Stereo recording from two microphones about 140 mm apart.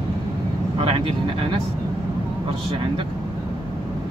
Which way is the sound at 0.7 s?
40° right (ahead or behind).